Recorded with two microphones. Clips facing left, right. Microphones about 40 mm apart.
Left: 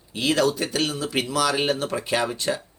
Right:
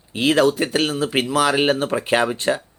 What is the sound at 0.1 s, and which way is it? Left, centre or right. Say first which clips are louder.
Speech: right 5 dB; right.